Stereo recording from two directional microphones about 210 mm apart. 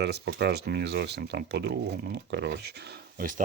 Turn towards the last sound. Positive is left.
turn(degrees=-40)  # may be behind; listen again after turning